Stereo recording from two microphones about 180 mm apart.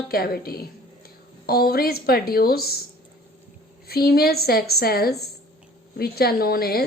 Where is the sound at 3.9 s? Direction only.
60° left (ahead or behind).